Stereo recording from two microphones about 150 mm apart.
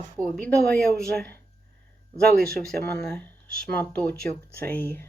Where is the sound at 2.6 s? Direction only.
90° right.